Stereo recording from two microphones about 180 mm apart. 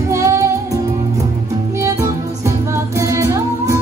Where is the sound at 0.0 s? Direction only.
15° right (ahead or behind).